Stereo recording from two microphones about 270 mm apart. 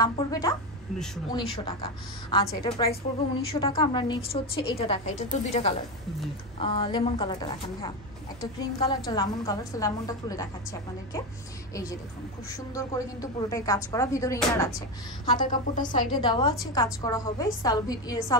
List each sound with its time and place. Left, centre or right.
0.0 s a woman's voice: centre
15.3 s a woman's voice: left
16.1 s a woman's voice: centre